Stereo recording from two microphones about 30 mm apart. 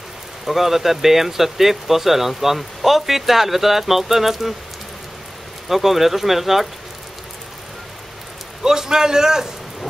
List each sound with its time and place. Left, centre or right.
0.5 s speech: centre
5.7 s speech: centre
8.6 s a man's voice: centre